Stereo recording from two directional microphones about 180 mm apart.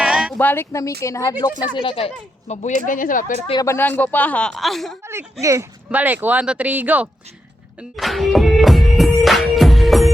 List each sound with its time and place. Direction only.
0.0 s a sound: 5° right (ahead or behind)
0.3 s speech: 10° left (ahead or behind); by 2.7 s 40° left (ahead or behind)
2.8 s speech: 50° left (ahead or behind)
3.6 s speech: 15° left (ahead or behind)
5.0 s speech: 15° right (ahead or behind)
7.8 s music: centre (ahead or behind)